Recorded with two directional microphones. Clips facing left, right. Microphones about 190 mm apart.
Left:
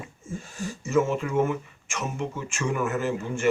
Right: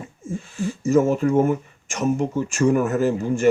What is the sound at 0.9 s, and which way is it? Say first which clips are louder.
Speech: right 6 dB; 40° right (ahead or behind).